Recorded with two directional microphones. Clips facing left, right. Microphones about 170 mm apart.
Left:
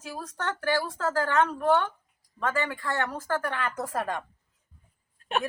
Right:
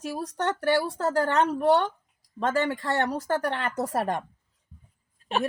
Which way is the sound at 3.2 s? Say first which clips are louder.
Right 3 dB; 25° right (ahead or behind).